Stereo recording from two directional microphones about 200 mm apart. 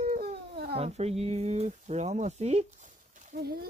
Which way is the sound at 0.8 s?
30° right (ahead or behind).